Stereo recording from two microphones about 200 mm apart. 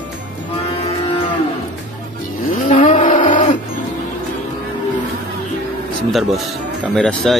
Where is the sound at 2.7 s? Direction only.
40° left (ahead or behind).